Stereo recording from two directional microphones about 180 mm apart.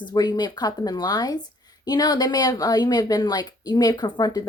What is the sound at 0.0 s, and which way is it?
A woman's voice, 20° left (ahead or behind).